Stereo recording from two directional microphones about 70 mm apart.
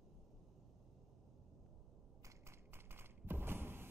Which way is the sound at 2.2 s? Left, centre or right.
Right.